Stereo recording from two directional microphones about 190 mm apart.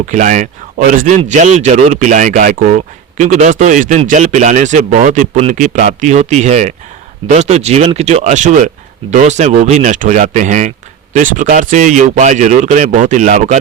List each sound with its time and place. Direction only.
0.1 s speech: 40° right (ahead or behind)